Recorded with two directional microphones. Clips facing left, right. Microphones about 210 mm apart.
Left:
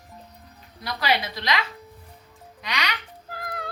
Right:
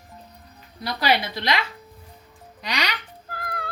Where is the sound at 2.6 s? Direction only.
35° right (ahead or behind).